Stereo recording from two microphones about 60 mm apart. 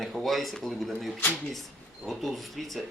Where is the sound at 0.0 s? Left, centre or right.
Centre.